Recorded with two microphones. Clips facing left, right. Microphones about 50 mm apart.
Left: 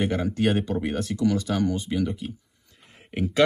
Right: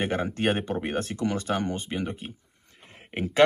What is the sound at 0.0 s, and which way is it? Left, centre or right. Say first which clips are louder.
Speech: left 2 dB; right.